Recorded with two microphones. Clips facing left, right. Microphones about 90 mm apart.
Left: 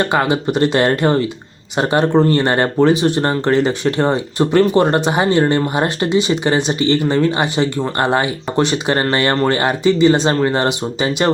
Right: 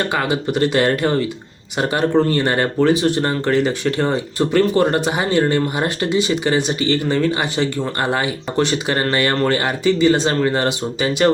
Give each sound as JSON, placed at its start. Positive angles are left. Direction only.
{"t": 0.0, "sound": "speech", "side_deg": 25}